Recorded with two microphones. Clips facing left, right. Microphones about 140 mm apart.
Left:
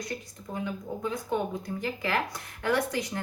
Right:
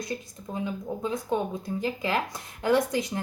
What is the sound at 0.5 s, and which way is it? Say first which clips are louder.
Speech: right 2 dB; 20° right (ahead or behind).